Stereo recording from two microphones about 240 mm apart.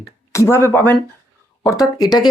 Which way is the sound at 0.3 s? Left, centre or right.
Centre.